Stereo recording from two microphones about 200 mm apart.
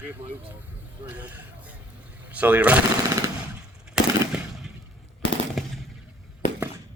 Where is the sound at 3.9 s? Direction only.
5° right (ahead or behind).